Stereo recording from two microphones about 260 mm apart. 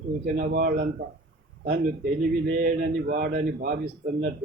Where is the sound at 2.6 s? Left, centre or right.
Right.